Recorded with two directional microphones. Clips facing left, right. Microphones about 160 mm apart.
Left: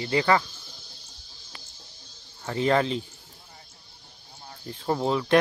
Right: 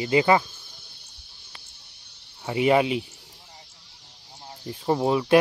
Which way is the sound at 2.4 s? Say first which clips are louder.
Right 3 dB; 10° right (ahead or behind).